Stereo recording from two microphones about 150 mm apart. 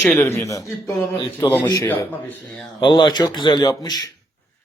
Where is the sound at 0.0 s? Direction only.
10° left (ahead or behind).